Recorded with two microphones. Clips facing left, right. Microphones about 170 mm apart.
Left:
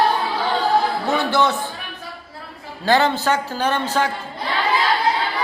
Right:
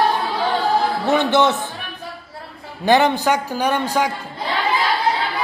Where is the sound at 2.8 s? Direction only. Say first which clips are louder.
Right 2 dB; 20° right (ahead or behind).